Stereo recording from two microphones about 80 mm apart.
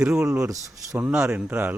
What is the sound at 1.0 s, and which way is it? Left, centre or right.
Speech, centre.